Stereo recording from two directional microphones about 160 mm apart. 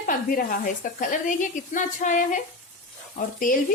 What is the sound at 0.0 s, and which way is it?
Speech, 60° left (ahead or behind).